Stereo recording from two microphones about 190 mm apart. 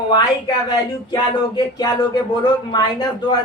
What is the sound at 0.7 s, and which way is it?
A man's voice, 20° left (ahead or behind).